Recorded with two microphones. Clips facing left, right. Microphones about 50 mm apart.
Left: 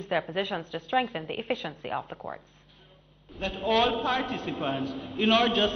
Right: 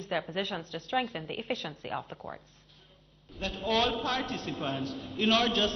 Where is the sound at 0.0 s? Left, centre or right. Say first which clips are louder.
Left 4 dB; centre.